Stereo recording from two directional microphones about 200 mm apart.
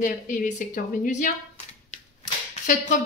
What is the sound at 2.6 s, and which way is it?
Speech, 40° left (ahead or behind).